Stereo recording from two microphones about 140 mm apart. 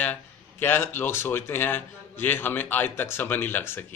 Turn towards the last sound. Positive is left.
turn(degrees=15)  # may be behind; listen again after turning